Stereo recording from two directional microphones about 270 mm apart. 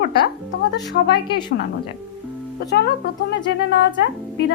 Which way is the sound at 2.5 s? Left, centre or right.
Left.